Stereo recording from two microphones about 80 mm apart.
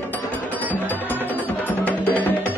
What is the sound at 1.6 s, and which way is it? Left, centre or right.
Wood block, left.